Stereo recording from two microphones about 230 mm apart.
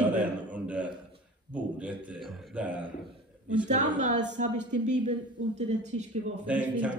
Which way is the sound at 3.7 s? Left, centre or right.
Right.